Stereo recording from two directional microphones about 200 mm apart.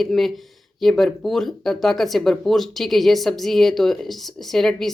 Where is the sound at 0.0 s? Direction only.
Centre (ahead or behind).